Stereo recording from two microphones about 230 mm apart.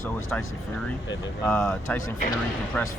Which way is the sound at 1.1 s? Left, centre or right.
Centre.